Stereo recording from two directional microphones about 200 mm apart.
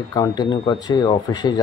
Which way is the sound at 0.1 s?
20° left (ahead or behind).